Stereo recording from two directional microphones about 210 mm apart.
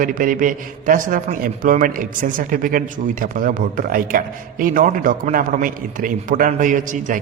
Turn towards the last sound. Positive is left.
turn(degrees=-40)  # may be behind; listen again after turning